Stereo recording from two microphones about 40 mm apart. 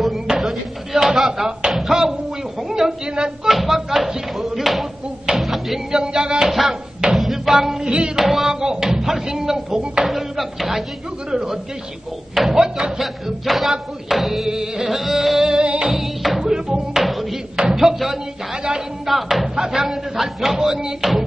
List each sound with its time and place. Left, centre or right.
0.4 s a sound: centre
2.7 s a woman's voice: centre
3.4 s speech: centre
5.4 s a sound: centre
5.9 s speech: centre
6.5 s speech: centre
7.2 s music: centre
8.2 s speech: centre
12.4 s speech: centre
15.5 s music: right
15.9 s music: centre
16.9 s a sound: centre
19.0 s speech: centre